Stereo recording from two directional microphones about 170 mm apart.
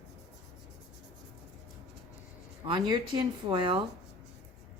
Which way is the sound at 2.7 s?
30° right (ahead or behind).